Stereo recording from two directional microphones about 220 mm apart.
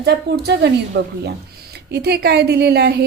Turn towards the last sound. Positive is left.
turn(degrees=-45)  # may be behind; listen again after turning